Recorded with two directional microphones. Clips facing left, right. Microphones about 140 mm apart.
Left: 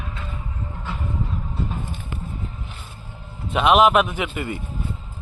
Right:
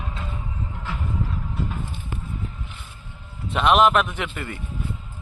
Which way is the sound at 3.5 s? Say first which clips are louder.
Left 2 dB; 5° left (ahead or behind).